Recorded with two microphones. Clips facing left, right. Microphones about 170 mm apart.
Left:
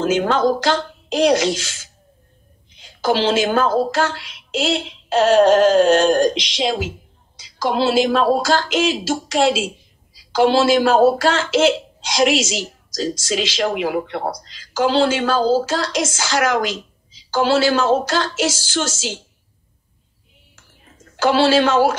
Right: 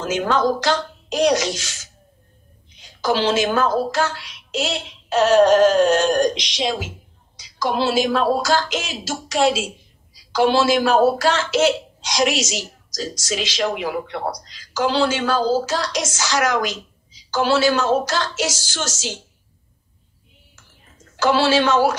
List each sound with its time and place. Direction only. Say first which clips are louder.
0.0 s a woman's voice: left 3 dB; 30° left (ahead or behind)
3.0 s a woman's voice: left 2 dB; 30° left (ahead or behind)
21.2 s a woman's voice: left 2 dB; 30° left (ahead or behind)